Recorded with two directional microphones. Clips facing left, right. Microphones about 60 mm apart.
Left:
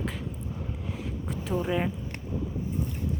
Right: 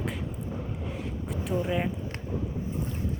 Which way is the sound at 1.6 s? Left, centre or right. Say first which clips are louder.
Left 3 dB; centre.